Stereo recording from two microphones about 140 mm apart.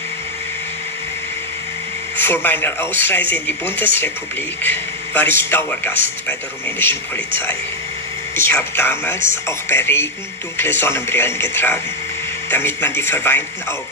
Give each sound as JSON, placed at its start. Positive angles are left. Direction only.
{"t": 2.1, "sound": "speech", "side_deg": 15}